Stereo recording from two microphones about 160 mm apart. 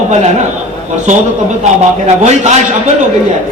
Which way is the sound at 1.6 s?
45° right (ahead or behind).